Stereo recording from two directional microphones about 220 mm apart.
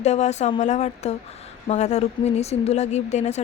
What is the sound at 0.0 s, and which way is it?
Speech, 30° left (ahead or behind).